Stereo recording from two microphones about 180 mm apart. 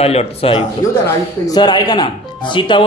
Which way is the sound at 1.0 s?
20° left (ahead or behind).